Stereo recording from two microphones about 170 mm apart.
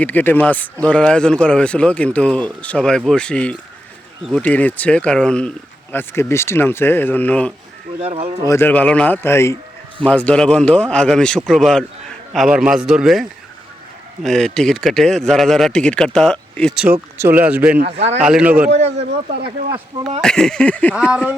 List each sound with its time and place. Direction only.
0.0 s speech: 10° left (ahead or behind)
8.0 s speech: 35° right (ahead or behind)
8.4 s speech: 10° left (ahead or behind)
16.8 s speech: 10° right (ahead or behind)
18.7 s speech: 40° right (ahead or behind)
20.2 s speech: 5° left (ahead or behind)
20.9 s speech: 5° right (ahead or behind)